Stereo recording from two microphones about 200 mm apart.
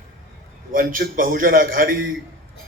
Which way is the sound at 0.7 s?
45° right (ahead or behind).